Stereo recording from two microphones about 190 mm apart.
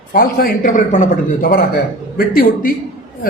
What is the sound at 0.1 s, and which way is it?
A man's voice, 50° left (ahead or behind).